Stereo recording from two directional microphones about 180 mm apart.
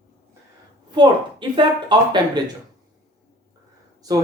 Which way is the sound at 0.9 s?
25° right (ahead or behind).